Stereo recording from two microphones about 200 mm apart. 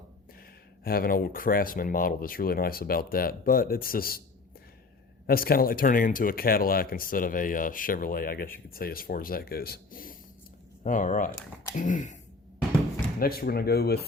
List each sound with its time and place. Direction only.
0.9 s speech: 45° left (ahead or behind)
5.2 s speech: 50° left (ahead or behind)
13.1 s speech: 50° left (ahead or behind)